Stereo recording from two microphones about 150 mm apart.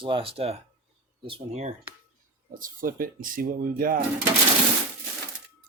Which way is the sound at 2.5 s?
65° right (ahead or behind).